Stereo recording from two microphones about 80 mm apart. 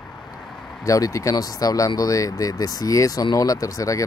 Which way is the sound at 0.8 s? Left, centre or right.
Left.